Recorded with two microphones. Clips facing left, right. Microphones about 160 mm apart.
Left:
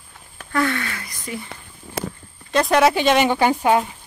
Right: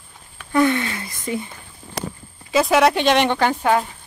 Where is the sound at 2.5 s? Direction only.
Centre (ahead or behind).